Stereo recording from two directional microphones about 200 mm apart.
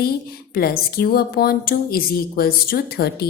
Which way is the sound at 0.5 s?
50° left (ahead or behind).